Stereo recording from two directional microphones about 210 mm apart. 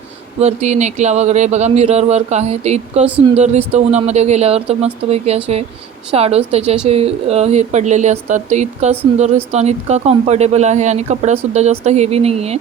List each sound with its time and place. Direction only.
0.3 s a woman's voice: 30° right (ahead or behind)